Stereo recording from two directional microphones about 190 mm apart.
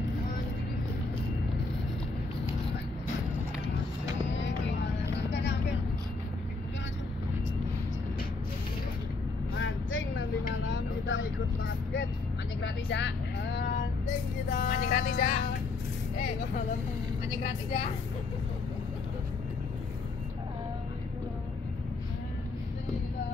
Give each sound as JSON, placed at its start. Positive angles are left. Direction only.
{"t": 4.3, "sound": "vehicle", "side_deg": 70}
{"t": 9.6, "sound": "vehicle", "side_deg": 85}
{"t": 12.6, "sound": "vehicle", "side_deg": 70}
{"t": 14.5, "sound": "vehicle", "side_deg": 45}